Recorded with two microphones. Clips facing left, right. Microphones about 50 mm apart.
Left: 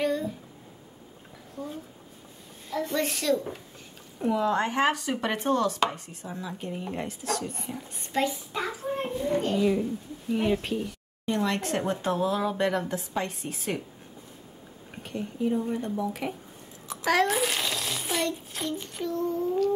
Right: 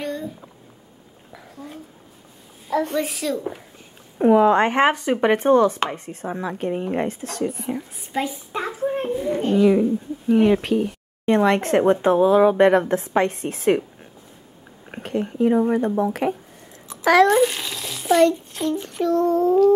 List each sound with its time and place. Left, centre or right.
0.0 s a sound: centre
2.9 s speech: centre
4.2 s speech: right
4.9 s speech: right
6.2 s speech: right
7.4 s speech: centre
8.5 s a sound: right
9.1 s speech: centre
9.6 s speech: right
11.2 s speech: right
14.9 s speech: right
17.3 s a sound: centre
18.5 s child singing: centre
18.9 s a sound: right